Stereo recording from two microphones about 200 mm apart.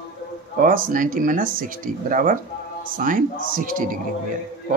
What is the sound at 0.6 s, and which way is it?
Speech, 45° right (ahead or behind).